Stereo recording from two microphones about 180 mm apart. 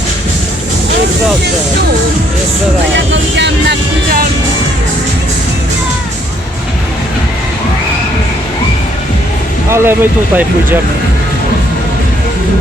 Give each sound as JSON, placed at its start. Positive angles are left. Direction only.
{"t": 3.1, "sound": "vehicle", "side_deg": -80}
{"t": 9.6, "sound": "speech", "side_deg": -15}